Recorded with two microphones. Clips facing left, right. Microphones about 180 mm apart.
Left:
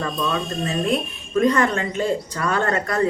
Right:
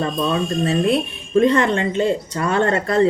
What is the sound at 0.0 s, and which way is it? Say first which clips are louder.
Speech: right 4 dB; 30° right (ahead or behind).